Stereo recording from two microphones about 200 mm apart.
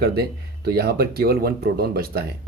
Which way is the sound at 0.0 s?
50° right (ahead or behind).